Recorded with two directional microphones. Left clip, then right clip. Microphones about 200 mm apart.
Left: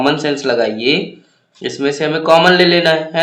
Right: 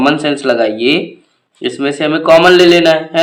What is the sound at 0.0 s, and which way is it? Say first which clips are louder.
A man's voice: right 3 dB; 30° right (ahead or behind).